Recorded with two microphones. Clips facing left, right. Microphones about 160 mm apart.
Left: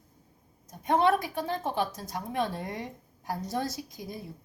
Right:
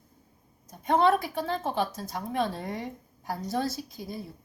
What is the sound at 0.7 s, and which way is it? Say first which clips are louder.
A woman's voice: right 1 dB; 15° left (ahead or behind).